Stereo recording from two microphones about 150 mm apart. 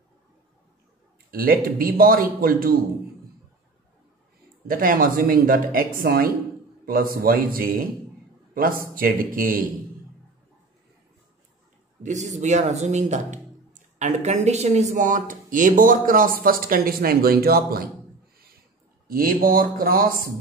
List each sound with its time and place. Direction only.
1.3 s speech: 75° right (ahead or behind)
4.6 s speech: 70° right (ahead or behind)
8.9 s speech: 70° right (ahead or behind)
12.0 s speech: 55° right (ahead or behind); by 17.8 s 90° right
19.0 s speech: 70° right (ahead or behind)